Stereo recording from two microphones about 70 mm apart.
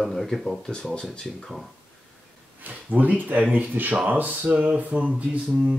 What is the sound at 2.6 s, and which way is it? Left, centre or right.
Speech, right.